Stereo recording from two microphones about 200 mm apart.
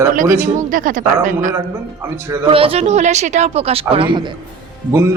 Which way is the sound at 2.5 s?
30° right (ahead or behind).